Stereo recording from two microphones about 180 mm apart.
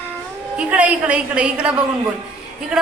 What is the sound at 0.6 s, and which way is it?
A woman's voice, 10° right (ahead or behind).